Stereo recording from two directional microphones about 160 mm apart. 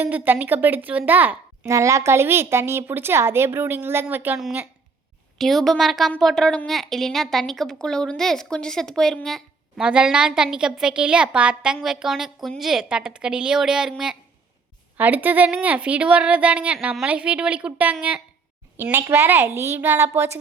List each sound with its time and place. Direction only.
0.0 s a woman's voice: 10° right (ahead or behind)